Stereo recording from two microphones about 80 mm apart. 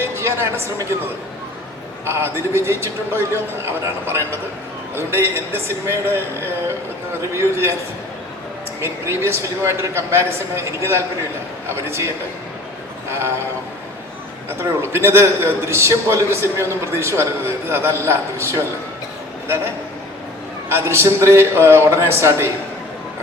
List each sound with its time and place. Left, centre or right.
0.0 s a woman's voice: right
2.0 s a man's voice: right
7.3 s a man's voice: right
8.8 s a man's voice: right
14.6 s a man's voice: right
20.7 s a man's voice: right